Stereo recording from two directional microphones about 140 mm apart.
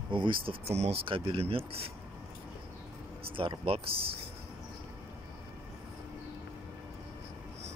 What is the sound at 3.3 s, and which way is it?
Speech, 40° right (ahead or behind).